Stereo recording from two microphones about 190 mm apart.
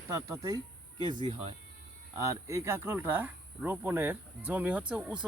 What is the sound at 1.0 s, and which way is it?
Speech, 25° right (ahead or behind).